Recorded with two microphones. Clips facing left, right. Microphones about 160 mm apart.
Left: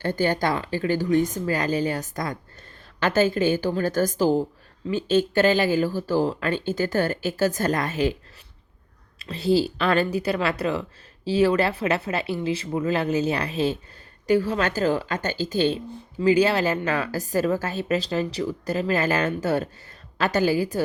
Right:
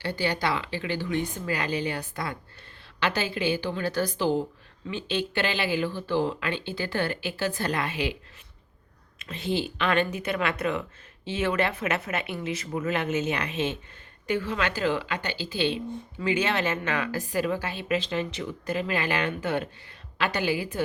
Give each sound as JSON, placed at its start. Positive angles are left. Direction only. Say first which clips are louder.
{"t": 0.0, "sound": "a woman's voice", "louder": "left 5 dB", "side_deg": 45}
{"t": 9.1, "sound": "speech", "louder": "left 8 dB", "side_deg": 35}